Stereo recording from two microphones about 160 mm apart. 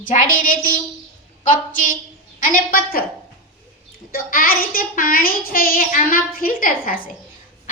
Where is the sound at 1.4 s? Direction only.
55° left (ahead or behind).